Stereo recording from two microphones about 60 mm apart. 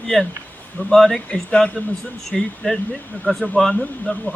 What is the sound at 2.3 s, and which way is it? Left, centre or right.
Speech, centre.